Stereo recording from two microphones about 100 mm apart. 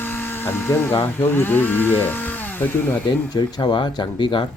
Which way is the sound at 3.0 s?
45° left (ahead or behind).